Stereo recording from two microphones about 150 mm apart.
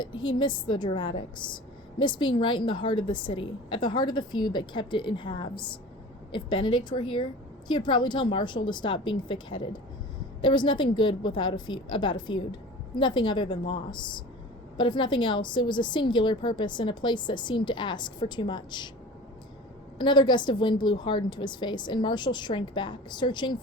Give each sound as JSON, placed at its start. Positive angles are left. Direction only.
{"t": 0.3, "sound": "a woman's voice", "side_deg": 35}
{"t": 20.0, "sound": "a woman's voice", "side_deg": 30}